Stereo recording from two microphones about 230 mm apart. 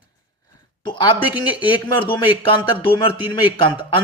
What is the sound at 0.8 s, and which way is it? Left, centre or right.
A woman's voice, centre.